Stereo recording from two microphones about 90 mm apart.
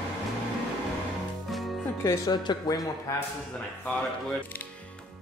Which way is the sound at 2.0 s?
30° left (ahead or behind).